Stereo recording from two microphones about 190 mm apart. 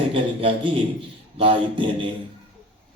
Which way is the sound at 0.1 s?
30° right (ahead or behind).